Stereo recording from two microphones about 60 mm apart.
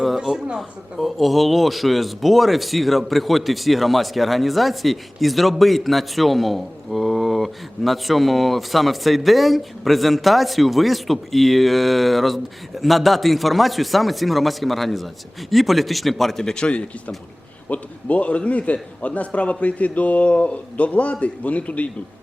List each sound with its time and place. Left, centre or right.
0.0 s speech: centre
0.9 s a man's voice: centre; by 21.8 s left